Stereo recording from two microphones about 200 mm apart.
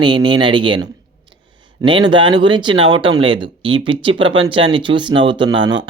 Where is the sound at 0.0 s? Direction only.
25° right (ahead or behind).